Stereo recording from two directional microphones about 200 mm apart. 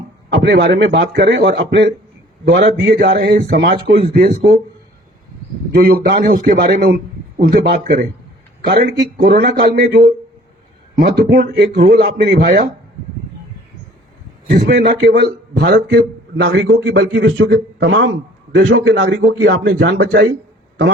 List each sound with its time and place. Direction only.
0.4 s a man's voice: 55° right (ahead or behind)
5.7 s speech: 45° right (ahead or behind)
14.8 s a man's voice: 55° right (ahead or behind)